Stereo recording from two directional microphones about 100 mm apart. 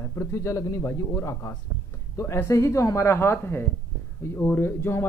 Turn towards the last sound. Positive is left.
turn(degrees=25)  # may be behind; listen again after turning